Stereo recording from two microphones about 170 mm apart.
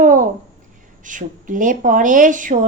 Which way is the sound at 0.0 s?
50° right (ahead or behind).